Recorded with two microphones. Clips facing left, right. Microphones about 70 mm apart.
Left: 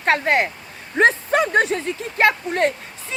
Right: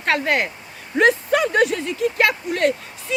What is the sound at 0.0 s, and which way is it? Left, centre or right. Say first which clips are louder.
Speech: left 2 dB; left.